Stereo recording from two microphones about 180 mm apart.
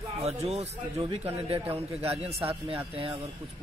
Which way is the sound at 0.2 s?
35° right (ahead or behind).